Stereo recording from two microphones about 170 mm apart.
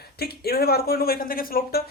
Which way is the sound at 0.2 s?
65° left (ahead or behind).